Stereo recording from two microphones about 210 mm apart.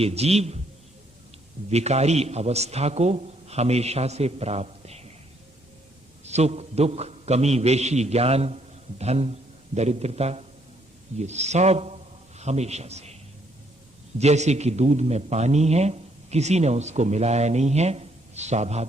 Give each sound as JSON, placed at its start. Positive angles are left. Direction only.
{"t": 0.0, "sound": "a man's voice", "side_deg": -30}
{"t": 1.7, "sound": "a man's voice", "side_deg": -30}
{"t": 6.2, "sound": "a man's voice", "side_deg": -30}
{"t": 14.2, "sound": "a man's voice", "side_deg": -30}